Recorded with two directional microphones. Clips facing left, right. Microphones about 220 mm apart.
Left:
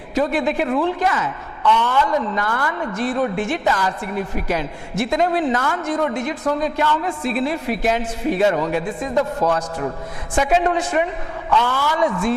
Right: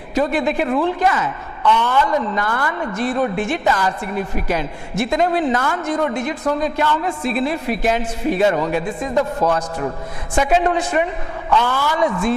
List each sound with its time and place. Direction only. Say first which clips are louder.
0.2 s a woman's voice: right 1 dB; 15° right (ahead or behind)